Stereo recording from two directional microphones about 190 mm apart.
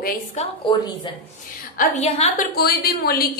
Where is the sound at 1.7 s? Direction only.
40° left (ahead or behind).